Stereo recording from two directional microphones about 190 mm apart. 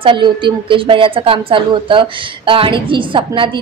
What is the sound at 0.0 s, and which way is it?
A woman's voice, 25° right (ahead or behind).